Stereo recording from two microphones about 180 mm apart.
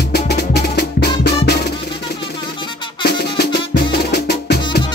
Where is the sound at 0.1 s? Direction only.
65° left (ahead or behind).